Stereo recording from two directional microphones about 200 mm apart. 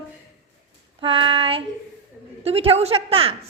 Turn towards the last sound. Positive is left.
turn(degrees=-30)  # may be behind; listen again after turning